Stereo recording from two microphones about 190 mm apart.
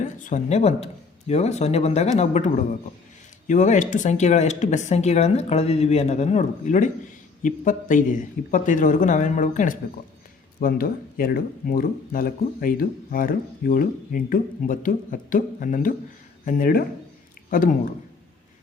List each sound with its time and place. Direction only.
0.0 s speech: 40° left (ahead or behind)